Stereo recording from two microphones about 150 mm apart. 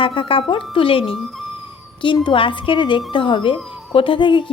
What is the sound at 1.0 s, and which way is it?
Speech, centre (ahead or behind).